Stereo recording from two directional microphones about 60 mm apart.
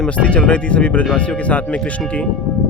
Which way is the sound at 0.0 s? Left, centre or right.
Left.